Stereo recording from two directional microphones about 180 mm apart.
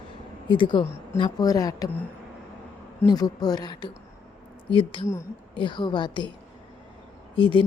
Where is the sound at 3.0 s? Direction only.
20° left (ahead or behind).